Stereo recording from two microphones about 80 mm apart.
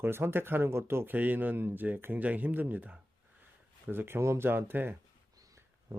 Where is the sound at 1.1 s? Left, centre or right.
Right.